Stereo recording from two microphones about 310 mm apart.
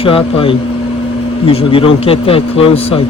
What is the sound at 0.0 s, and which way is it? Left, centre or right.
A man's voice, centre.